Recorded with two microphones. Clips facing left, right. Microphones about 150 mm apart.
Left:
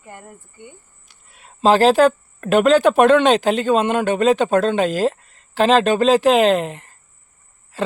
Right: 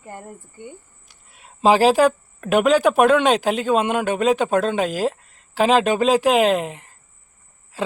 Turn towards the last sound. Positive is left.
turn(degrees=-10)  # may be behind; listen again after turning